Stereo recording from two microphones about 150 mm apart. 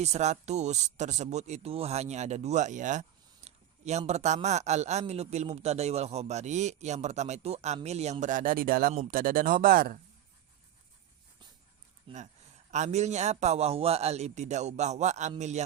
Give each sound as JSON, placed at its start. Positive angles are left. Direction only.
{"t": 0.0, "sound": "a man's voice", "side_deg": -50}
{"t": 12.1, "sound": "speech", "side_deg": -35}
{"t": 12.7, "sound": "speech", "side_deg": -50}